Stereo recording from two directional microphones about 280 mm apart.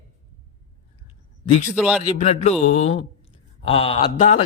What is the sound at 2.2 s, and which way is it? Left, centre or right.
A man's voice, left.